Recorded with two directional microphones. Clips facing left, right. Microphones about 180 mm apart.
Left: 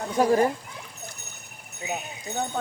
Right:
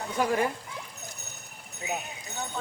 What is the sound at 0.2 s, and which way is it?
Speech, 35° left (ahead or behind).